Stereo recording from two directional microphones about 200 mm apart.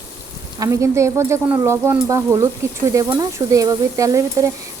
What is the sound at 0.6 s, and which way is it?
Speech, 15° right (ahead or behind).